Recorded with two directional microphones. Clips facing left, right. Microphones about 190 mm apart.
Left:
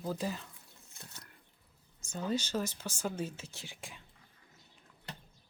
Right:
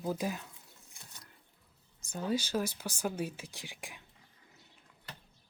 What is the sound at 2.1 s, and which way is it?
Speech, 10° right (ahead or behind).